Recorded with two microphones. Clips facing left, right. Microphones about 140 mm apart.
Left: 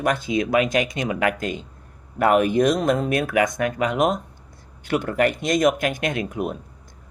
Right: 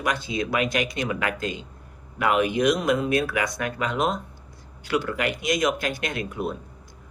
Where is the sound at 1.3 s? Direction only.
25° right (ahead or behind).